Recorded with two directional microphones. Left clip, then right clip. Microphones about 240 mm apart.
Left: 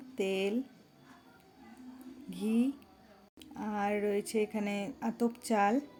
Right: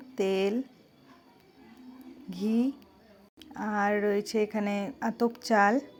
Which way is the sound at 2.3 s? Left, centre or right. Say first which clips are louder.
Right 3 dB; centre.